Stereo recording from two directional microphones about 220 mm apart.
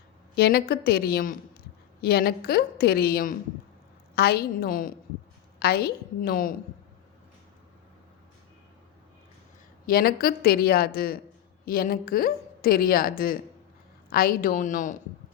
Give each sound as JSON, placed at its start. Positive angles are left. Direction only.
{"t": 0.3, "sound": "speech", "side_deg": 45}
{"t": 9.8, "sound": "a woman's voice", "side_deg": 45}